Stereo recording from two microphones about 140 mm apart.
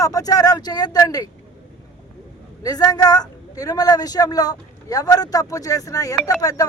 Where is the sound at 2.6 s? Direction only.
30° left (ahead or behind).